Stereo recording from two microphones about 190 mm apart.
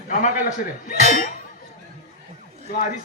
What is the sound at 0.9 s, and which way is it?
Speech, 45° left (ahead or behind).